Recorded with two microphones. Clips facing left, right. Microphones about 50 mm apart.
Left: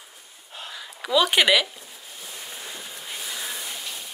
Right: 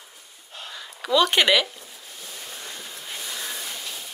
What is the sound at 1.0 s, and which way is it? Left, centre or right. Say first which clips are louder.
Speech: even; centre.